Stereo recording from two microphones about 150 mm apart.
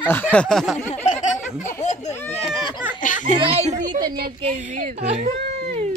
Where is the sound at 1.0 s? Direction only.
55° left (ahead or behind).